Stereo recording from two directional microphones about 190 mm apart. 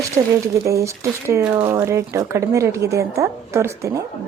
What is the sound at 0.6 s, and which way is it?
A woman's voice, 15° right (ahead or behind).